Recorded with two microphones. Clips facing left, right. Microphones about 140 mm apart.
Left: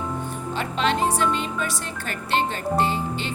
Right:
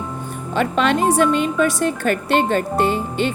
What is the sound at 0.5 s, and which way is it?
A woman's voice, 55° right (ahead or behind).